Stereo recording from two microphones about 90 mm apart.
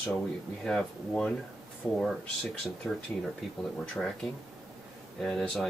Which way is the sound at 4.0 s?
5° left (ahead or behind).